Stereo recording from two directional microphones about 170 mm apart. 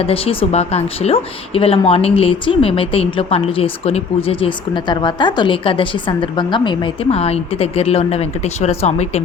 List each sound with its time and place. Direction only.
0.0 s a woman's voice: 35° left (ahead or behind)